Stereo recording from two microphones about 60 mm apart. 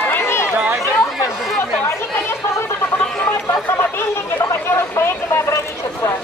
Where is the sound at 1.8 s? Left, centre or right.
Left.